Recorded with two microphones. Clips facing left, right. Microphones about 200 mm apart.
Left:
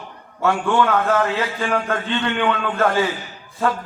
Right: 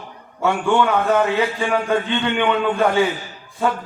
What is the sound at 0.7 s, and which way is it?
A man's voice, centre (ahead or behind).